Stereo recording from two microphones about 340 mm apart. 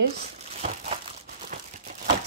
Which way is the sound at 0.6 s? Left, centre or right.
Centre.